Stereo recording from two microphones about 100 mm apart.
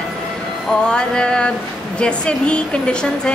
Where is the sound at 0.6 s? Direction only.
10° left (ahead or behind).